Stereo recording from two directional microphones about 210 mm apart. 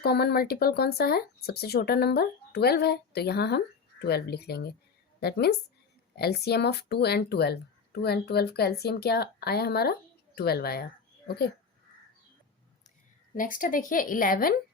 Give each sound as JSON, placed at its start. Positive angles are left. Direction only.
{"t": 0.0, "sound": "speech", "side_deg": 50}
{"t": 13.3, "sound": "a woman's voice", "side_deg": 40}